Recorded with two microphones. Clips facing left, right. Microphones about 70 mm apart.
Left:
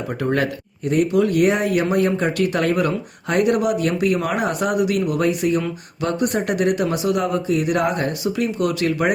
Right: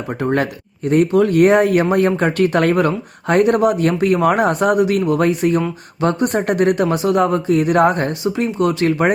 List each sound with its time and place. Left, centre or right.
0.2 s speech: right
0.9 s speech: right